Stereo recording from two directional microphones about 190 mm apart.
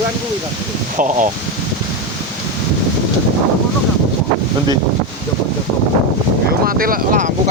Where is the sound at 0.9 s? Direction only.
45° right (ahead or behind).